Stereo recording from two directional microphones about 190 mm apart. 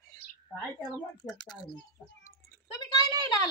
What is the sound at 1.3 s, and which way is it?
Speech, 20° left (ahead or behind).